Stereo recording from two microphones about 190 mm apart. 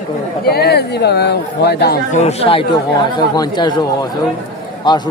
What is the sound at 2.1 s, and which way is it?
Speech, 35° left (ahead or behind).